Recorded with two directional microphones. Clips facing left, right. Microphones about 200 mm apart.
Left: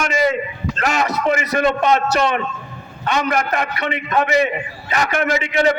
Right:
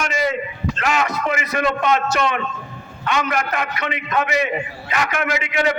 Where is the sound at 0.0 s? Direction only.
50° left (ahead or behind).